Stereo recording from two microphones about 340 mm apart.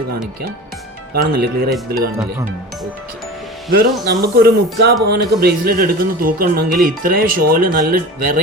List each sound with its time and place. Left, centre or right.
1.1 s speech: right
3.7 s speech: right